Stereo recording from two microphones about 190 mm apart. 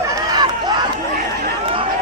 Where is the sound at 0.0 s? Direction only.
15° right (ahead or behind).